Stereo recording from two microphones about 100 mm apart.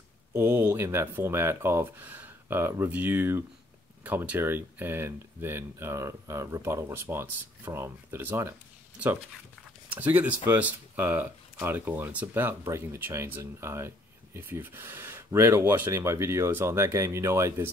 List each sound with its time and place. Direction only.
0.3 s speech: 20° right (ahead or behind)
9.8 s speech: 15° right (ahead or behind)